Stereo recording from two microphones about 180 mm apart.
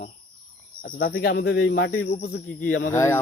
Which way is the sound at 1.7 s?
50° left (ahead or behind).